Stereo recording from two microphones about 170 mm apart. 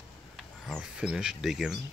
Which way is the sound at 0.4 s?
Centre (ahead or behind).